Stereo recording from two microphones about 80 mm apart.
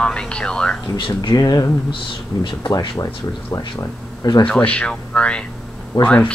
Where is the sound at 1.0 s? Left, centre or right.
Left.